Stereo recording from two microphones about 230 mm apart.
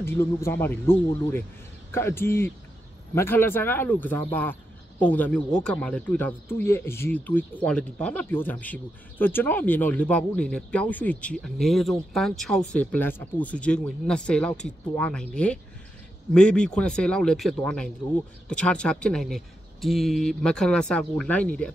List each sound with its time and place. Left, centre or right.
0.0 s speech: centre